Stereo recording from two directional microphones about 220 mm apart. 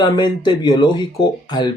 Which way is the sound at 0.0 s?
20° left (ahead or behind).